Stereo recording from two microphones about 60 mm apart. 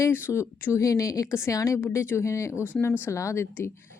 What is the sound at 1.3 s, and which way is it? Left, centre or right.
Speech, left.